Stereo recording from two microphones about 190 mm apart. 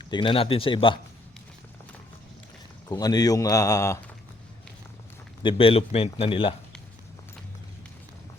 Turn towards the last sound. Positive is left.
turn(degrees=30)  # may be behind; listen again after turning